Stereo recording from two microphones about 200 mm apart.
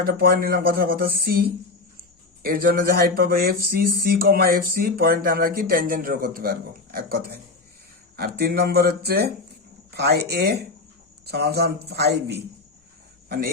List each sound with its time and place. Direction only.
0.0 s speech: 50° right (ahead or behind)
8.4 s speech: 50° right (ahead or behind)